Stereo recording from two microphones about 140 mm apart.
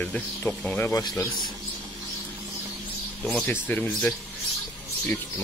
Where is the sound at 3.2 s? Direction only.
10° left (ahead or behind).